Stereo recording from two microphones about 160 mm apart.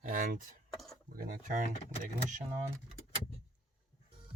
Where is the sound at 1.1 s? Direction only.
55° right (ahead or behind).